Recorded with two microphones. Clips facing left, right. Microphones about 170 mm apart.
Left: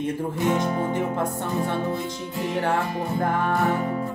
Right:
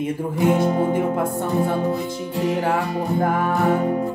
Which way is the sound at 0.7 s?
30° right (ahead or behind).